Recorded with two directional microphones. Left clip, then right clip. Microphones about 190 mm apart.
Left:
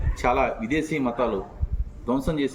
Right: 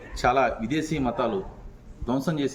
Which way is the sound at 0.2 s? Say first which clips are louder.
Right 1 dB; 15° right (ahead or behind).